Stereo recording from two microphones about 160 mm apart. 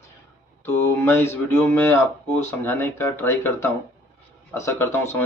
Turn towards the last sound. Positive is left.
turn(degrees=15)  # may be behind; listen again after turning